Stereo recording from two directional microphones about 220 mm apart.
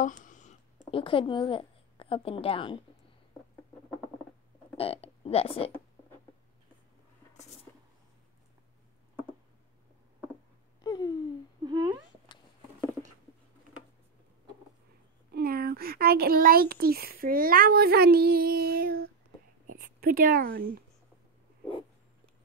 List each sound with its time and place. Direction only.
0.0 s a sound: 35° left (ahead or behind)
0.9 s a woman's voice: 25° left (ahead or behind)
4.7 s speech: 25° left (ahead or behind)
10.8 s a sound: 15° left (ahead or behind)
11.6 s speech: 15° right (ahead or behind)
15.3 s a child's voice: 45° right (ahead or behind)